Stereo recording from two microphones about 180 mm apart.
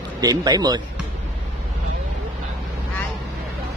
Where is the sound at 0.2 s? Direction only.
20° right (ahead or behind).